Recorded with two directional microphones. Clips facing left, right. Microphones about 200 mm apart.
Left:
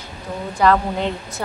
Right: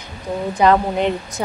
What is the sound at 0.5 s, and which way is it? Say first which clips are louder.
Speech: right 2 dB; 20° right (ahead or behind).